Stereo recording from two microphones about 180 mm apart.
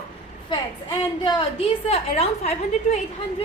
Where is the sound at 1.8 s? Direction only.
35° left (ahead or behind).